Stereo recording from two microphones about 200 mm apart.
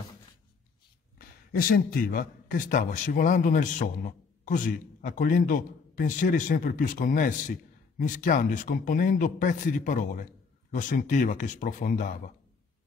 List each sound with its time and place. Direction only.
1.1 s a man's voice: 50° left (ahead or behind)